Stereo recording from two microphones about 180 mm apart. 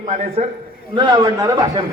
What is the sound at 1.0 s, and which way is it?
Speech, 20° right (ahead or behind).